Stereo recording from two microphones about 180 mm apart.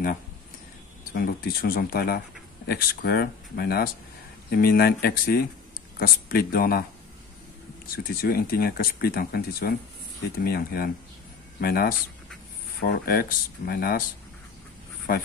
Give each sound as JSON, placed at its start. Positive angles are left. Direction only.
{"t": 1.1, "sound": "speech", "side_deg": 60}
{"t": 7.8, "sound": "speech", "side_deg": 55}